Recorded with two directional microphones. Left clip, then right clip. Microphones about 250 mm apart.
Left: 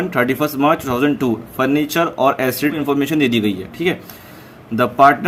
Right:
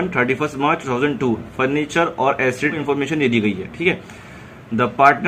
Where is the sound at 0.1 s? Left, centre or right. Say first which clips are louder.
Left 2 dB; left.